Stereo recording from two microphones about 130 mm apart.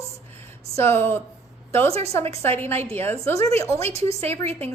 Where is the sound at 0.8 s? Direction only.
20° left (ahead or behind).